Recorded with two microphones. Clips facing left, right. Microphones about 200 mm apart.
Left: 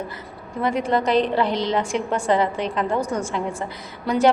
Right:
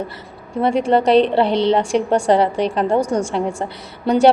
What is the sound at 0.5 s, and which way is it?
A woman's voice, 30° right (ahead or behind).